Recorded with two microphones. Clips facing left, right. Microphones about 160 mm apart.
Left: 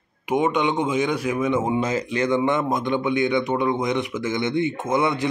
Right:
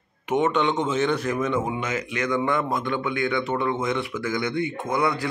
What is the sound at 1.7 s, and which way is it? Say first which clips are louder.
Speech: left 5 dB; 30° left (ahead or behind).